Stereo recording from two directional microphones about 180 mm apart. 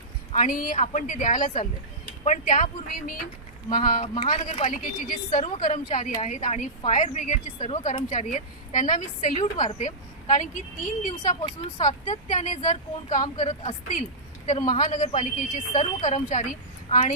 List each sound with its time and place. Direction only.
0.3 s speech: 45° left (ahead or behind)
4.1 s speech: 25° left (ahead or behind)
4.4 s speech: 45° left (ahead or behind)
11.8 s speech: 40° left (ahead or behind)